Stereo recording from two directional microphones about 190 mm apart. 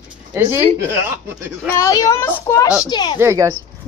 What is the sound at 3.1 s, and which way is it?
Speech, 15° right (ahead or behind).